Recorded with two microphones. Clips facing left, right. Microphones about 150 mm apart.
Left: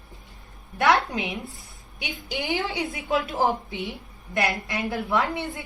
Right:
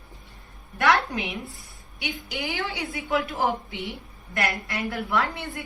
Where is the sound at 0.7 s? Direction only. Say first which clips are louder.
Left 1 dB; 20° left (ahead or behind).